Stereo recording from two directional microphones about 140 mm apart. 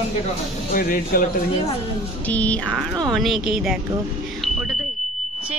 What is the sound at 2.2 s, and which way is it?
A woman's voice, 10° left (ahead or behind).